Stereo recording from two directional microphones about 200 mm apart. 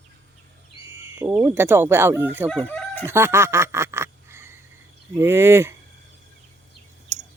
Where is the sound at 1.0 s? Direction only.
10° right (ahead or behind).